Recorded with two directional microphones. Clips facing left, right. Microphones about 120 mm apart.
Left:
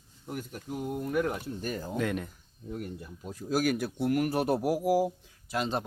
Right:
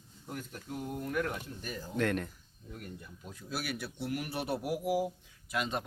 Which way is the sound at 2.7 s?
30° left (ahead or behind).